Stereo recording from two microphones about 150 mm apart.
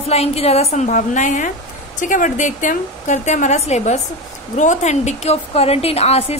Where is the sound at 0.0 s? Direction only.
45° left (ahead or behind).